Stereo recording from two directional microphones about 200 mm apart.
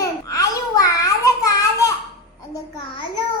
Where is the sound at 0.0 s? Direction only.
15° left (ahead or behind).